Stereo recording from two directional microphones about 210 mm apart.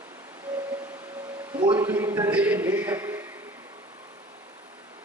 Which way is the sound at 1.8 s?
10° right (ahead or behind).